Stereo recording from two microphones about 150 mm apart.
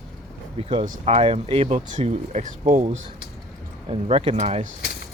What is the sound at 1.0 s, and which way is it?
Speech, 40° right (ahead or behind).